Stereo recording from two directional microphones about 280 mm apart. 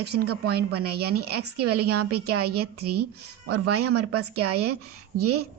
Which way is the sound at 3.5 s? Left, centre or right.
Right.